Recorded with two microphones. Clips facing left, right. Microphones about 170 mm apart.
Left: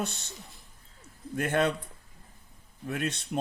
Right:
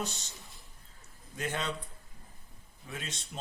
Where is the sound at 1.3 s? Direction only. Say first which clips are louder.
Left 9 dB; 55° left (ahead or behind).